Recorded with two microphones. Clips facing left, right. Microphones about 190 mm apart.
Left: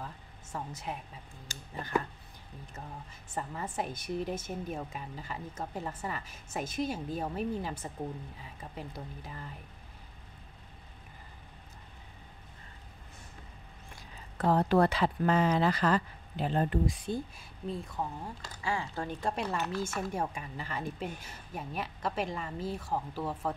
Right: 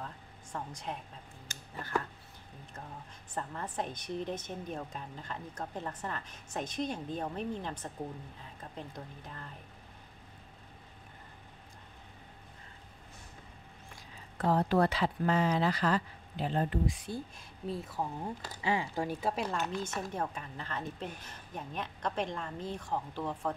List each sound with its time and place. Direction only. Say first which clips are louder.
0.0 s a woman's voice: left 1 dB; 5° left (ahead or behind)
14.5 s speech: left 2 dB; 60° left (ahead or behind)
17.6 s speech: even; 5° right (ahead or behind)
18.2 s speech: right 2 dB; 20° right (ahead or behind); by 19.6 s 5° right (ahead or behind)
19.8 s a woman's voice: left 2 dB; 10° left (ahead or behind)